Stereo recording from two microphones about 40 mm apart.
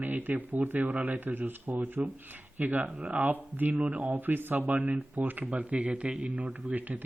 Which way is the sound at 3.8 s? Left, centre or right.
Right.